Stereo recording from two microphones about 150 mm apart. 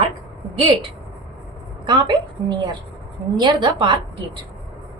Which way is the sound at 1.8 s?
30° right (ahead or behind).